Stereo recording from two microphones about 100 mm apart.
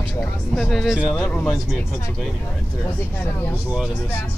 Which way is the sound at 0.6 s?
5° left (ahead or behind).